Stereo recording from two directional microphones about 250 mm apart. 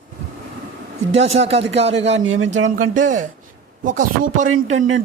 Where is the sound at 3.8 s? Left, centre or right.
Right.